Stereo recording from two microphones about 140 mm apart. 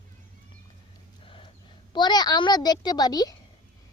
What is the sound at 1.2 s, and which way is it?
Horse, 40° left (ahead or behind).